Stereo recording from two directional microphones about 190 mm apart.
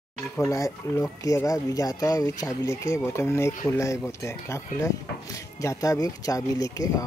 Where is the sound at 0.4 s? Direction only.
15° left (ahead or behind).